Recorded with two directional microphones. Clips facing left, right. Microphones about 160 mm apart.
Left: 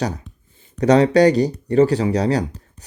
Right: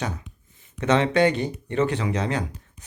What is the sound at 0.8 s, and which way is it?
Speech, 35° left (ahead or behind).